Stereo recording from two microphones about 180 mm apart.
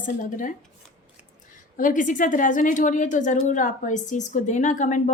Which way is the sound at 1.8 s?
50° left (ahead or behind).